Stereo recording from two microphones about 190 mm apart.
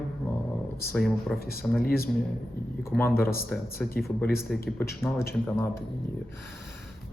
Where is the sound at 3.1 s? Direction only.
50° left (ahead or behind).